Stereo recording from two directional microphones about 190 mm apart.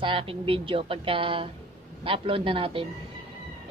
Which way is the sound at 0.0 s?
30° right (ahead or behind).